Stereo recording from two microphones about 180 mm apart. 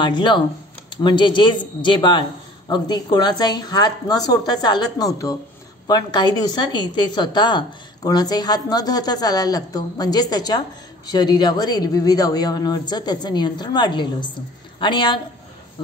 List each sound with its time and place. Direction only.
0.0 s speech: 25° left (ahead or behind)